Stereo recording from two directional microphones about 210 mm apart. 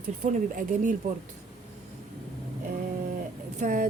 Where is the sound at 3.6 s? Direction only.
40° right (ahead or behind).